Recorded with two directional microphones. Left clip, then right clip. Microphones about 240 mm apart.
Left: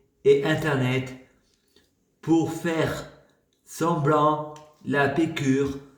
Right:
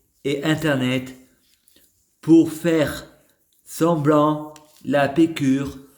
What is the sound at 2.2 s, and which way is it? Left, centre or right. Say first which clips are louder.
A man's voice: right 8 dB; right.